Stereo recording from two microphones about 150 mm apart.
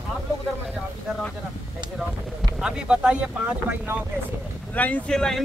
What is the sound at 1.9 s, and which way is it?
Speech, 5° right (ahead or behind).